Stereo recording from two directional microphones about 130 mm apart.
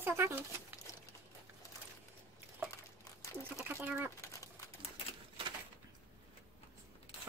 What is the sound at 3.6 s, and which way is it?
Bird, 15° right (ahead or behind).